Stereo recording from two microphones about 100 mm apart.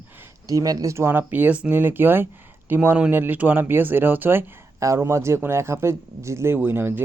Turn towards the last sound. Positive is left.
turn(degrees=-25)  # may be behind; listen again after turning